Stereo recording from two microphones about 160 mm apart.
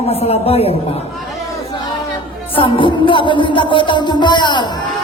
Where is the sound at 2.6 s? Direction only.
30° left (ahead or behind).